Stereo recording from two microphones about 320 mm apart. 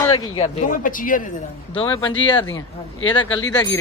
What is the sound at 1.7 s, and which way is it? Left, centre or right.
Speech, centre.